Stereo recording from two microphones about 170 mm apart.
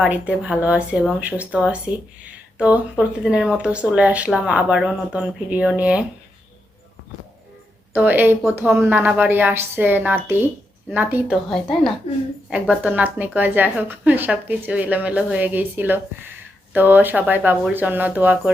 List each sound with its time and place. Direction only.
0.0 s a woman's voice: 5° right (ahead or behind)
7.9 s a woman's voice: 10° right (ahead or behind)
11.4 s a woman's voice: centre (ahead or behind)